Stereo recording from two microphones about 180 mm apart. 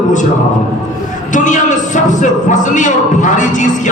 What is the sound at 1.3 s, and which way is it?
A man's voice, 45° left (ahead or behind).